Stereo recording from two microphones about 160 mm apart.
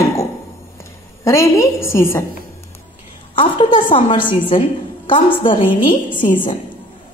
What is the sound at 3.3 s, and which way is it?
Speech, 30° left (ahead or behind).